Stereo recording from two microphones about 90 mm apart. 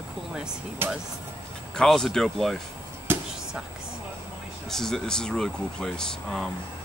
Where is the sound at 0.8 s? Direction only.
25° right (ahead or behind).